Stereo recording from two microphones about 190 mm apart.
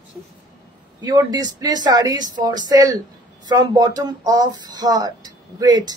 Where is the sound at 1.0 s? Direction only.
20° right (ahead or behind).